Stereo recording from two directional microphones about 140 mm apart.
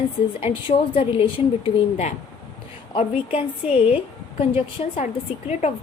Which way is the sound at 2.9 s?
45° left (ahead or behind).